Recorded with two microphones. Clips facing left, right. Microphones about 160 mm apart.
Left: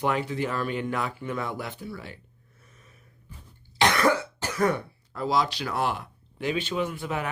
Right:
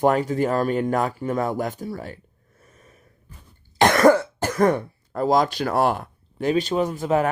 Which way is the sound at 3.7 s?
45° right (ahead or behind).